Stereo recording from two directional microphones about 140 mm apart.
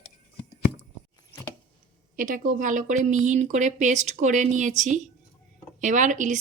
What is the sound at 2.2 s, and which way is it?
A woman's voice, 75° right (ahead or behind).